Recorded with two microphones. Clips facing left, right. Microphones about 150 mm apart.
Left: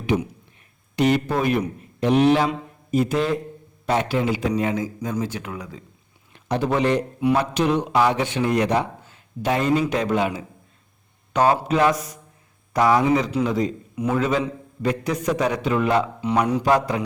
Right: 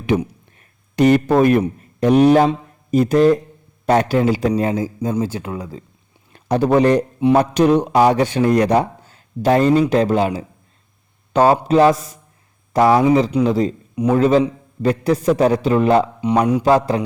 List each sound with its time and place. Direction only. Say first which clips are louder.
0.1 s a man's voice: right 5 dB; 50° right (ahead or behind); by 17.0 s 30° right (ahead or behind)